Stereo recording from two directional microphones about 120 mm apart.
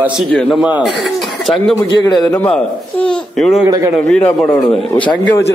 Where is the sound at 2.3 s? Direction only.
15° left (ahead or behind).